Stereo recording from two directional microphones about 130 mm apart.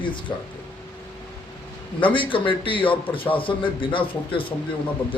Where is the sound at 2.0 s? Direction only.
40° left (ahead or behind).